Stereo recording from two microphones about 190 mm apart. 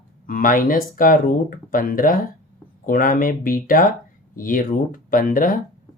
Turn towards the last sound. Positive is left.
turn(degrees=45)  # may be behind; listen again after turning